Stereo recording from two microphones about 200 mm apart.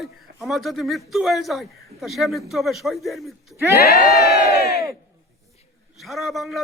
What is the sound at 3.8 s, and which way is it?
Crowd, 50° left (ahead or behind).